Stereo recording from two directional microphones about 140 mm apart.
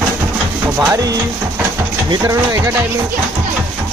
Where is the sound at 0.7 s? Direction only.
25° right (ahead or behind).